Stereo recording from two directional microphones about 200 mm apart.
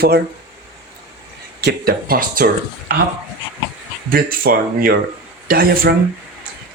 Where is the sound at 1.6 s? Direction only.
50° right (ahead or behind).